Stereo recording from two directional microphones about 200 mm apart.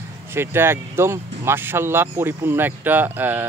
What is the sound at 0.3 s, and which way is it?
Speech, 10° right (ahead or behind).